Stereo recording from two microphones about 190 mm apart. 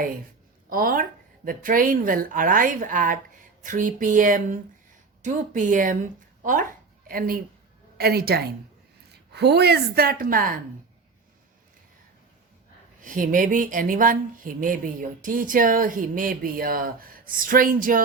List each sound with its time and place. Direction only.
0.7 s a woman's voice: 50° right (ahead or behind)
13.0 s speech: 45° right (ahead or behind)